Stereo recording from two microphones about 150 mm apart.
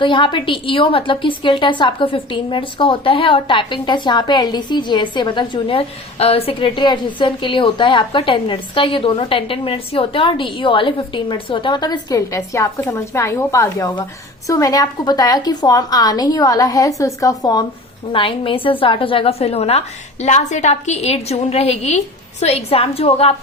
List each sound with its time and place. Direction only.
0.0 s a woman's voice: 30° left (ahead or behind)